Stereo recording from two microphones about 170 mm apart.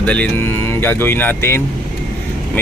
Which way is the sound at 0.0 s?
5° left (ahead or behind).